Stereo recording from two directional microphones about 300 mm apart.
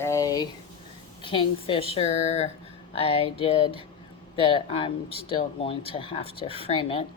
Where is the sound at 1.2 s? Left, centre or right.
Centre.